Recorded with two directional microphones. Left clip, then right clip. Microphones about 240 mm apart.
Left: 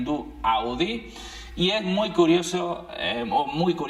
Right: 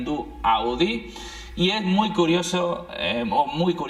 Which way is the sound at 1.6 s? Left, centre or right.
Right.